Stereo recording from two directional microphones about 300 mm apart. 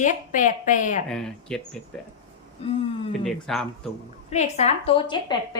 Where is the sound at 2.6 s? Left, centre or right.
Centre.